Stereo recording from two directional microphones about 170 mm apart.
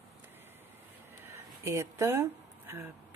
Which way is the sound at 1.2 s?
15° right (ahead or behind).